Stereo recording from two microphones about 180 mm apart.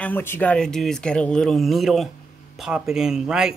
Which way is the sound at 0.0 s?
10° left (ahead or behind).